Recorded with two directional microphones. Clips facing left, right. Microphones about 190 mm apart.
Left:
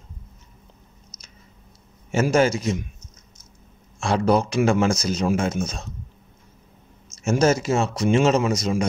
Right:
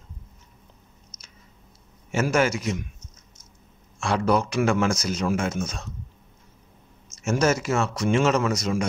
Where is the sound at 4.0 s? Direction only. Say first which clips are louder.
Left 3 dB; 30° left (ahead or behind).